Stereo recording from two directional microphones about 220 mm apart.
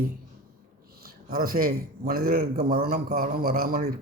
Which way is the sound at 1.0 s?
40° right (ahead or behind).